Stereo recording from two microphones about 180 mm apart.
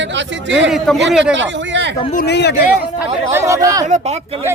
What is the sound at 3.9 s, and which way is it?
Speech, 40° right (ahead or behind).